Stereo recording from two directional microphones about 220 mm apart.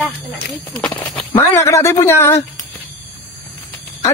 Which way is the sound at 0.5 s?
5° left (ahead or behind).